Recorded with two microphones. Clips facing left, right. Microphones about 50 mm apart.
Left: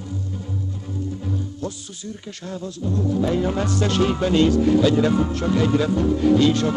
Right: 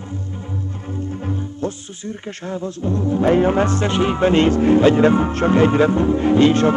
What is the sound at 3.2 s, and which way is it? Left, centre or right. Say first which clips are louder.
Music: right 9 dB; right.